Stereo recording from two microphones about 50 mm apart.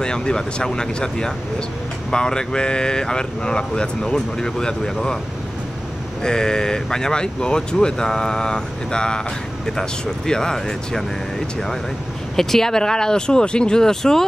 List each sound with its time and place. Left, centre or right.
0.0 s speech: centre
6.2 s speech: centre